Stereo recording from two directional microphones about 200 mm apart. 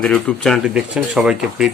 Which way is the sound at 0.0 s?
5° left (ahead or behind).